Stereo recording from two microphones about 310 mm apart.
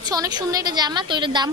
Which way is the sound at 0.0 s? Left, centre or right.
Centre.